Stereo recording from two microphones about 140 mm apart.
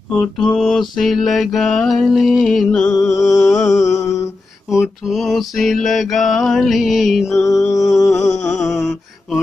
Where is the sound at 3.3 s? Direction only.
Centre (ahead or behind).